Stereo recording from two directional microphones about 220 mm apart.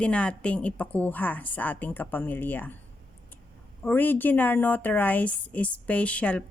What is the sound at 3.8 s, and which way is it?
Speech, 10° left (ahead or behind).